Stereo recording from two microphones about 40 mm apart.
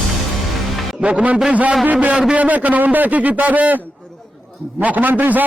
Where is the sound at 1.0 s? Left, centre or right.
Right.